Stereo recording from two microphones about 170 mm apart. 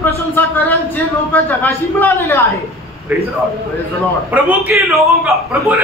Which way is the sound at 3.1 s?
10° right (ahead or behind).